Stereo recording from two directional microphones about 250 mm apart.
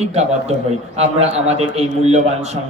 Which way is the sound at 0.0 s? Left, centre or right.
Right.